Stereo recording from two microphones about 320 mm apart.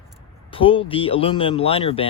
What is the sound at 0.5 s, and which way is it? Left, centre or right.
Speech, centre.